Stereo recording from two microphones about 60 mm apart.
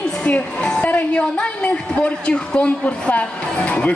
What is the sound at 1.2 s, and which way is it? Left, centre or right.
Speech, centre.